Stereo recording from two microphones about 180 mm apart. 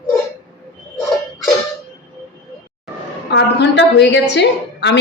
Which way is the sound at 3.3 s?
70° left (ahead or behind).